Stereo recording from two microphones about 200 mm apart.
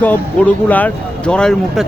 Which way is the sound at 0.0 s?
10° left (ahead or behind).